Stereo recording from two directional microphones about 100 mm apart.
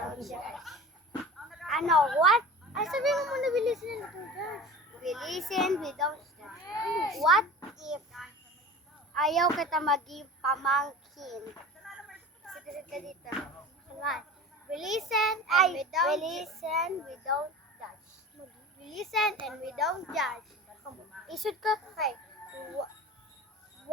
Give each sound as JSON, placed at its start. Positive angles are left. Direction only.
{"t": 0.2, "sound": "chuckle", "side_deg": 0}
{"t": 1.2, "sound": "a sound", "side_deg": 0}
{"t": 2.1, "sound": "a child's voice", "side_deg": 0}
{"t": 18.9, "sound": "a child's voice", "side_deg": 0}